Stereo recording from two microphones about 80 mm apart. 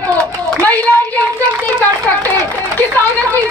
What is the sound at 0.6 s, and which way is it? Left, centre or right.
Speech, left.